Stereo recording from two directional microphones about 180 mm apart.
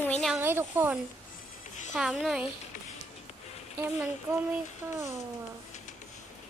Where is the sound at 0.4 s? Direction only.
10° right (ahead or behind).